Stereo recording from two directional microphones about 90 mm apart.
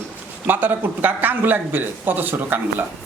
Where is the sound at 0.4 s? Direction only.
20° right (ahead or behind).